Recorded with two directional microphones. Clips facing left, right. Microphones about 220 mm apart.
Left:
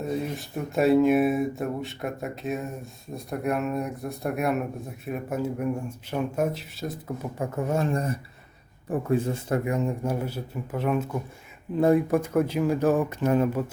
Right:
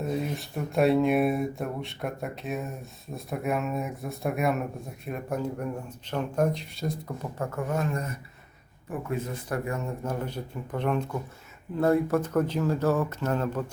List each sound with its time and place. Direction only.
0.0 s speech: centre (ahead or behind)
7.3 s speech: 15° left (ahead or behind)
7.7 s speech: 30° left (ahead or behind); by 13.7 s 10° left (ahead or behind)